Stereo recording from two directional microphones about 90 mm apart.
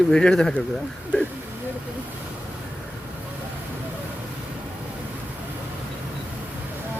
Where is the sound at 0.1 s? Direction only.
10° left (ahead or behind).